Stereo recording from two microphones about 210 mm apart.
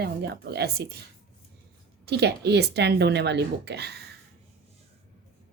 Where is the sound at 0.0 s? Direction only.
50° right (ahead or behind).